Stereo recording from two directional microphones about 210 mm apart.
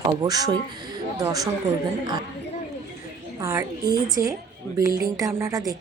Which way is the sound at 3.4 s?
15° right (ahead or behind).